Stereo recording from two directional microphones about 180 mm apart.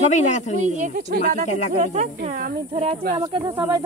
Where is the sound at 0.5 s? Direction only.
45° right (ahead or behind).